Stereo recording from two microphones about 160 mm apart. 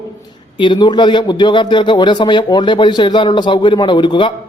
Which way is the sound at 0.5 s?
30° left (ahead or behind).